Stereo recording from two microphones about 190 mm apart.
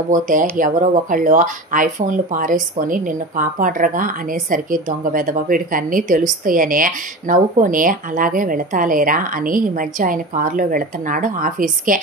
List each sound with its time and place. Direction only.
0.1 s speech: 45° right (ahead or behind)